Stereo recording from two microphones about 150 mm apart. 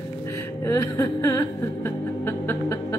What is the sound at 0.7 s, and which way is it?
Music, 20° left (ahead or behind).